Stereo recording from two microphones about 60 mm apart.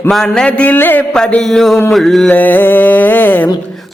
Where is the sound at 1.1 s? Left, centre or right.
Centre.